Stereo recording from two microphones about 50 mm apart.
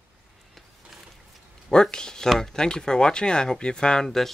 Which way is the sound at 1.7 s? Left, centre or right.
Centre.